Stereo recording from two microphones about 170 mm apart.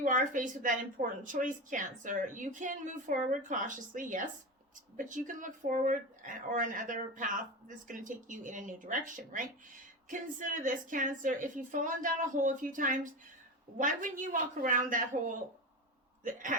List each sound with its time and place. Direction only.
0.0 s speech: 50° right (ahead or behind)